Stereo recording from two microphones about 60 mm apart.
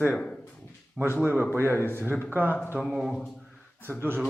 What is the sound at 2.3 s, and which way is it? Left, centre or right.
Speech, right.